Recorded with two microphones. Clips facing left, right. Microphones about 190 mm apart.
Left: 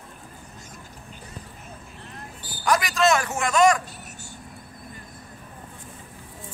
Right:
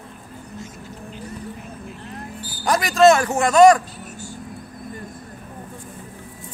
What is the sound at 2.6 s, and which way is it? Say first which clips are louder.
Speech: right 7 dB; 35° right (ahead or behind).